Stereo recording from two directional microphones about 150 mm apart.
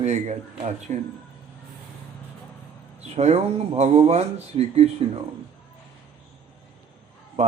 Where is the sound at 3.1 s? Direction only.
45° right (ahead or behind).